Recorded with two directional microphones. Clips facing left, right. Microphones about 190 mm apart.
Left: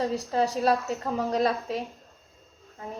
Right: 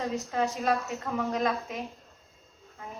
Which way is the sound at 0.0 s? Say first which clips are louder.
Left 3 dB; 35° left (ahead or behind).